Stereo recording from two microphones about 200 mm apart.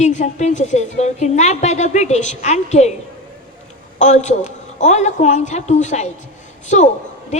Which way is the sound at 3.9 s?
35° left (ahead or behind).